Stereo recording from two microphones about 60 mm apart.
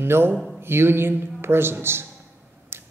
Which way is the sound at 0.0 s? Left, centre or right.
Right.